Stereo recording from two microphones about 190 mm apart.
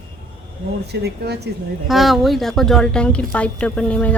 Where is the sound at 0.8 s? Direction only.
60° right (ahead or behind).